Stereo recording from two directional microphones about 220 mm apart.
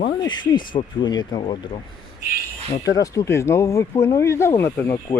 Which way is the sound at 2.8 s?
15° left (ahead or behind).